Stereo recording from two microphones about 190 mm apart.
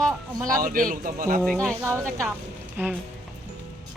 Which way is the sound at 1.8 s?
15° right (ahead or behind).